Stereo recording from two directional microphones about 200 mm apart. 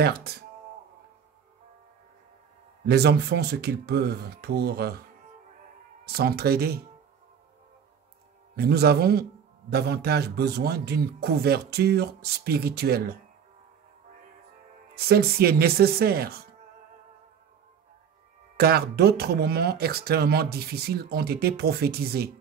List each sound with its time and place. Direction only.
0.0 s speech: 50° right (ahead or behind)
2.9 s speech: 55° right (ahead or behind)
6.0 s speech: 50° right (ahead or behind)
8.5 s speech: 50° right (ahead or behind)
15.0 s speech: 50° right (ahead or behind)
18.6 s speech: 50° right (ahead or behind)